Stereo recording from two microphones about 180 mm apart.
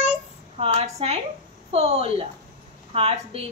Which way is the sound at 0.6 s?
35° right (ahead or behind).